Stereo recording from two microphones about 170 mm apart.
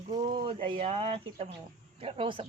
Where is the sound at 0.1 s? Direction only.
30° right (ahead or behind).